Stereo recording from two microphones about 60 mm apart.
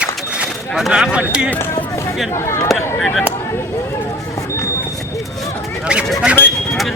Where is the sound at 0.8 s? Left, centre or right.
Centre.